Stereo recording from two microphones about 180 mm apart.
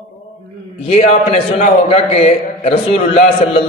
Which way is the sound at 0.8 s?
35° left (ahead or behind).